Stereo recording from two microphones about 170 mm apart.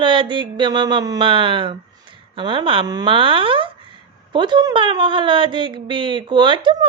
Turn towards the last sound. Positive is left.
turn(degrees=-30)  # may be behind; listen again after turning